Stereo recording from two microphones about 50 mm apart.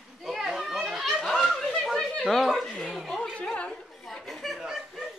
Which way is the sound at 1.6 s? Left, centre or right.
Centre.